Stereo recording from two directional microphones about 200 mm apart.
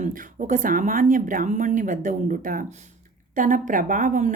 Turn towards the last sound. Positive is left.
turn(degrees=-40)  # may be behind; listen again after turning